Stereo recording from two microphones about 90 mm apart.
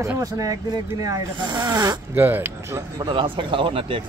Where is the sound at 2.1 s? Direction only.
25° right (ahead or behind).